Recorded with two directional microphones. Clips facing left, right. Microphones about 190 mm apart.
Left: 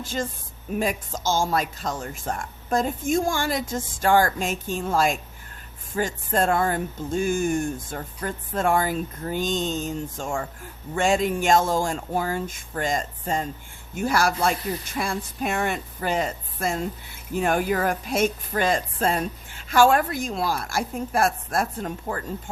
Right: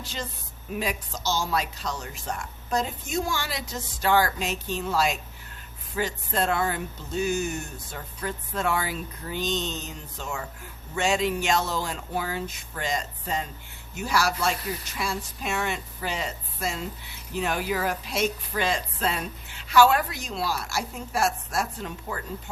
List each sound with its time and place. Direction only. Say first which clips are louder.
0.0 s speech: left 7 dB; 50° left (ahead or behind)